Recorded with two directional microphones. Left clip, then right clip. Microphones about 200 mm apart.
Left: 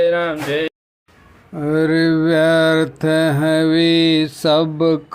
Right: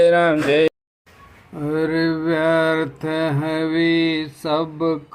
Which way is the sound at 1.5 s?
20° left (ahead or behind).